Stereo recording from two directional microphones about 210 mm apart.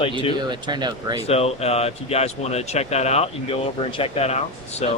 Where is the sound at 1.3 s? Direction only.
30° left (ahead or behind).